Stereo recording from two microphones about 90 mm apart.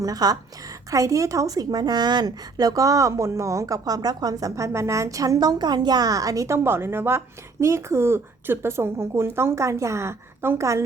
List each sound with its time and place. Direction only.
0.0 s a woman's voice: 45° right (ahead or behind)